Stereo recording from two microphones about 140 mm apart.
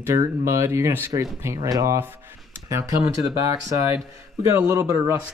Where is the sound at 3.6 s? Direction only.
20° right (ahead or behind).